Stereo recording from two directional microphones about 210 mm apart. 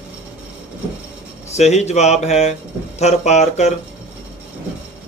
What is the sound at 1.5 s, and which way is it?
Speech, 30° left (ahead or behind).